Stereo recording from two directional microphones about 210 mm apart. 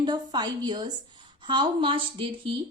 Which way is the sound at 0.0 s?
20° right (ahead or behind).